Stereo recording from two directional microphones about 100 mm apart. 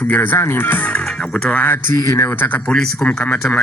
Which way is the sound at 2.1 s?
25° left (ahead or behind).